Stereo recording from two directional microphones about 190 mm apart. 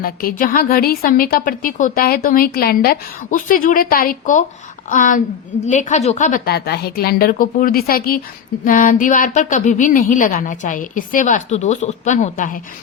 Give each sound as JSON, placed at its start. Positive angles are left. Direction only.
{"t": 0.0, "sound": "a woman's voice", "side_deg": 50}